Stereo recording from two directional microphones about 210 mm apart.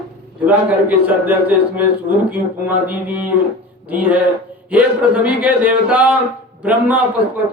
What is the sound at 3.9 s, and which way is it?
Speech, 5° right (ahead or behind).